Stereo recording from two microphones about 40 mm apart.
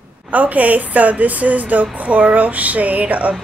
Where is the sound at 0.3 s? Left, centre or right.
Right.